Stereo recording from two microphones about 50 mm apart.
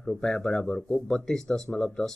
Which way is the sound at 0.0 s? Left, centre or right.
Centre.